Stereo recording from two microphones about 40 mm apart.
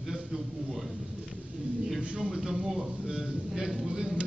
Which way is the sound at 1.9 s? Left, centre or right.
Right.